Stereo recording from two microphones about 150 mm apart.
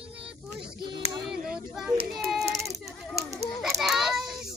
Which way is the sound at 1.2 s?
5° right (ahead or behind).